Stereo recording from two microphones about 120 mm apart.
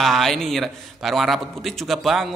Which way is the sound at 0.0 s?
Centre (ahead or behind).